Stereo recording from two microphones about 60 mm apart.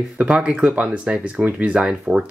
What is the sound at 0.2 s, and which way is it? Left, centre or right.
Speech, centre.